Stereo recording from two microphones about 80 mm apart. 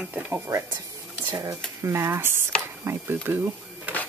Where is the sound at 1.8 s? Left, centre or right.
Right.